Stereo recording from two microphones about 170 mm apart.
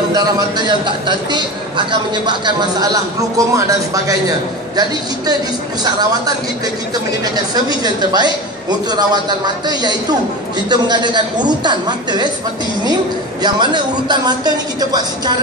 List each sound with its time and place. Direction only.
0.1 s a man's voice: 25° right (ahead or behind)
7.3 s a man's voice: 25° right (ahead or behind)
13.4 s a man's voice: 25° right (ahead or behind)